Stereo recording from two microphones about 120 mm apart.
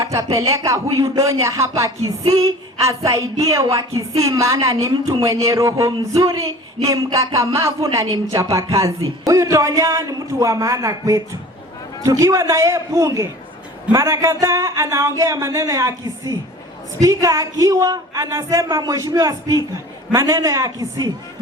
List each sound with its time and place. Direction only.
0.0 s speech: 25° right (ahead or behind)